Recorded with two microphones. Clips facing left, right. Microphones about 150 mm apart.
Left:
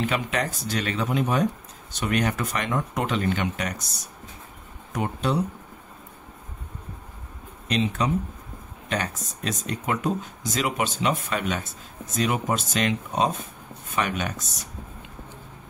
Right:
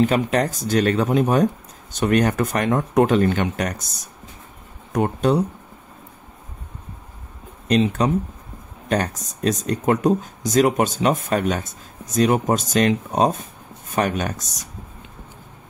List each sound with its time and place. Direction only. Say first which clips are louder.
0.0 s speech: right 8 dB; 40° right (ahead or behind)
4.9 s speech: right 7 dB; 45° right (ahead or behind)
7.6 s speech: right 6 dB; 40° right (ahead or behind)